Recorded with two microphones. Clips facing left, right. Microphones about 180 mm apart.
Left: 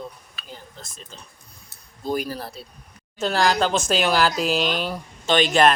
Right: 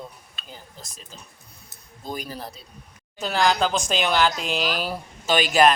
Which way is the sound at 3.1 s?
Centre (ahead or behind).